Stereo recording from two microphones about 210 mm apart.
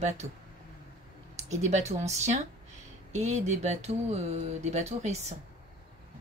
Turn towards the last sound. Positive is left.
turn(degrees=-30)  # may be behind; listen again after turning